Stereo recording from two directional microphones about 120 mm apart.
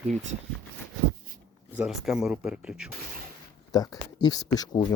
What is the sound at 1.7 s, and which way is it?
Speech, 5° right (ahead or behind).